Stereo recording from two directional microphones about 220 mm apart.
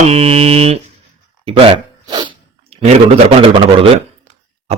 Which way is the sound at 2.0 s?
20° right (ahead or behind).